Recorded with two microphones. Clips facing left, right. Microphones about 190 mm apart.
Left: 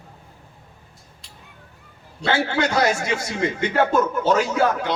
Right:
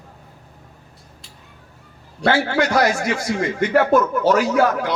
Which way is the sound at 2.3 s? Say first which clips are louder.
Right 3 dB; 25° left (ahead or behind).